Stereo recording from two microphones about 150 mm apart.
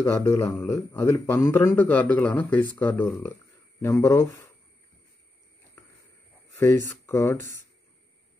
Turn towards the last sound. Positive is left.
turn(degrees=15)  # may be behind; listen again after turning